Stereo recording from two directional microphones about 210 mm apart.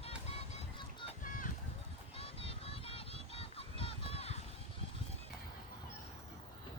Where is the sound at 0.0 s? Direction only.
30° left (ahead or behind).